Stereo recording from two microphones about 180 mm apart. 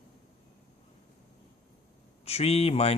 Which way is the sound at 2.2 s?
35° left (ahead or behind).